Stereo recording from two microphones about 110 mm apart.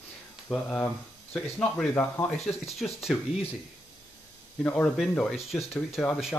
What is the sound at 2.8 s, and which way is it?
Speech, 5° left (ahead or behind).